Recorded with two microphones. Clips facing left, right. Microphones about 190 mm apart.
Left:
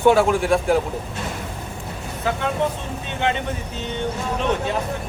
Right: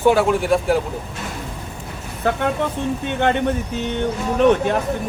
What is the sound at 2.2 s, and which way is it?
Speech, 55° right (ahead or behind).